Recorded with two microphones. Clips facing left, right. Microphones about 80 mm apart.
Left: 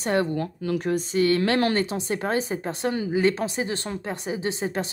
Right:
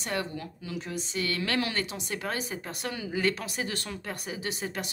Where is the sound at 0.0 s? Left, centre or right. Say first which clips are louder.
Left 9 dB; left.